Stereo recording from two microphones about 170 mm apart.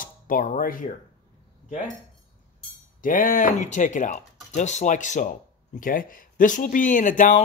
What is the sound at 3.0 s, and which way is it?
Speech, 50° left (ahead or behind).